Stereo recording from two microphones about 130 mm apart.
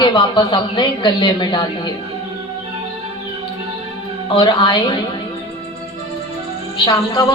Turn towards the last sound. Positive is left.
turn(degrees=40)  # may be behind; listen again after turning